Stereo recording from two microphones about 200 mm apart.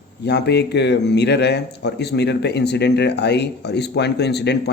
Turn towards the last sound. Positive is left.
turn(degrees=55)  # may be behind; listen again after turning